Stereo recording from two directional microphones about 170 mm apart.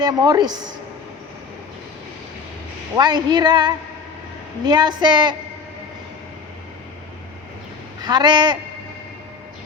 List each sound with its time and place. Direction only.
0.0 s a woman's voice: 25° right (ahead or behind)
2.9 s a woman's voice: 25° right (ahead or behind)
8.0 s a woman's voice: 25° right (ahead or behind)